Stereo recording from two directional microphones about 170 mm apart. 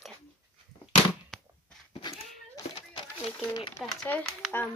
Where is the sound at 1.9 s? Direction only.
25° left (ahead or behind).